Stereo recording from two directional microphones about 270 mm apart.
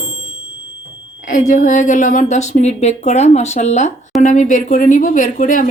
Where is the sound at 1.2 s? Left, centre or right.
Left.